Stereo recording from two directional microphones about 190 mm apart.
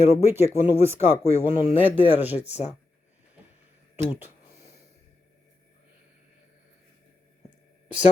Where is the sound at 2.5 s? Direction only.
35° left (ahead or behind).